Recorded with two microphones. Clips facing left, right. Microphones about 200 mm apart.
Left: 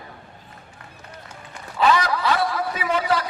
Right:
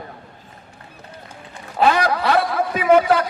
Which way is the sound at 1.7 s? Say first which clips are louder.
Right 2 dB; 50° right (ahead or behind).